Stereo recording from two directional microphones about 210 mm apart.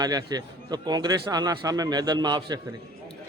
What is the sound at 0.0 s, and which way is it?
Speech, 20° right (ahead or behind).